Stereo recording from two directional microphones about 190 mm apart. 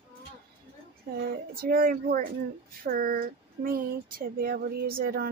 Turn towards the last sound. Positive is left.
turn(degrees=-50)  # may be behind; listen again after turning